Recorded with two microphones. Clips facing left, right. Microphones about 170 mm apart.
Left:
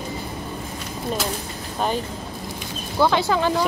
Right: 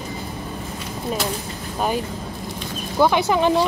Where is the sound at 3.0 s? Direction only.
15° right (ahead or behind).